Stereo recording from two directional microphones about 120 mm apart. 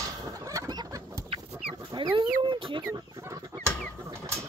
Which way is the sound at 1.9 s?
40° right (ahead or behind).